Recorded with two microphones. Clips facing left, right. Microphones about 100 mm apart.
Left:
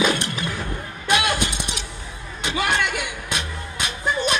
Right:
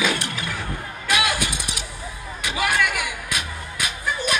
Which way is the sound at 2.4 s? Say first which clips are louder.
Even; 25° left (ahead or behind).